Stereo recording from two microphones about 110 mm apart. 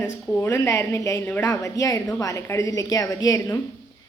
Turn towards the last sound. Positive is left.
turn(degrees=30)  # may be behind; listen again after turning